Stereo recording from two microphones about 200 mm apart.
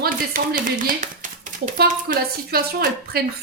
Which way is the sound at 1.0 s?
40° right (ahead or behind).